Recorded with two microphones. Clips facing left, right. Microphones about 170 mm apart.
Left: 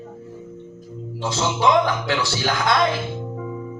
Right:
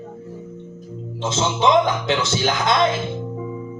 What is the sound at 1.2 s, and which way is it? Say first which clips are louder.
A man's voice: right 1 dB; 20° right (ahead or behind).